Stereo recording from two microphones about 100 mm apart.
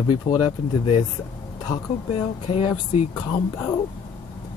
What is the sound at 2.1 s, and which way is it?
Speech, 80° left.